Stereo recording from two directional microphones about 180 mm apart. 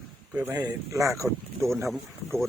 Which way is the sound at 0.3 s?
10° right (ahead or behind).